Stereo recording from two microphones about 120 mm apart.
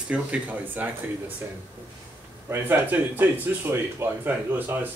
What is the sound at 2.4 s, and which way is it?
Speech, 20° right (ahead or behind).